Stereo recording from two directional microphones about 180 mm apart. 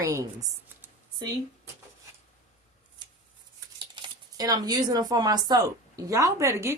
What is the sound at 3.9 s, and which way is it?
Speech, 25° right (ahead or behind).